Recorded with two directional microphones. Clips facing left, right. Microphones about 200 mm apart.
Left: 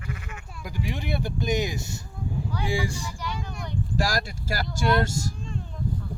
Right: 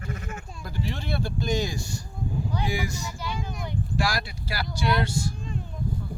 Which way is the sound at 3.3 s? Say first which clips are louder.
Right 3 dB; 20° right (ahead or behind).